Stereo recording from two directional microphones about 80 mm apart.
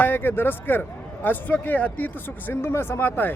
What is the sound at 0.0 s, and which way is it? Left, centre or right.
A man's voice, left.